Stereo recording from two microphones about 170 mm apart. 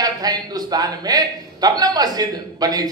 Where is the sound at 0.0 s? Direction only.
20° right (ahead or behind).